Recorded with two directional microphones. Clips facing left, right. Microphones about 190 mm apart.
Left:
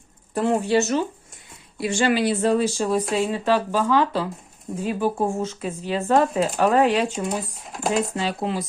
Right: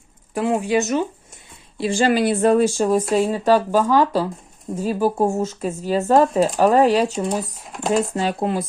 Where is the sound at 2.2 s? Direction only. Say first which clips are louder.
Right 4 dB; 55° right (ahead or behind); by 7.1 s 40° right (ahead or behind).